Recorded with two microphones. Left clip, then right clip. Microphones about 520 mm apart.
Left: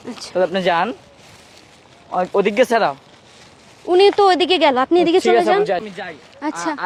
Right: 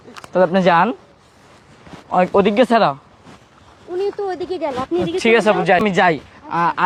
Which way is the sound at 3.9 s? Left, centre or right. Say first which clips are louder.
Left 10 dB; left.